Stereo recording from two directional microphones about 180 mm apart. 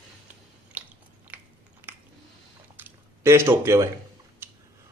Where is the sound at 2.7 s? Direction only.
15° right (ahead or behind).